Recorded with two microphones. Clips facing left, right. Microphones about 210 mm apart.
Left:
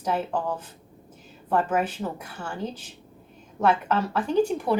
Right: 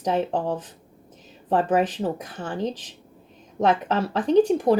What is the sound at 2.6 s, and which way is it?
Speech, 80° right.